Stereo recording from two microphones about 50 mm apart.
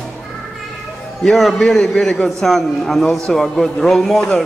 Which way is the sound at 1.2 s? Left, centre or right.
Centre.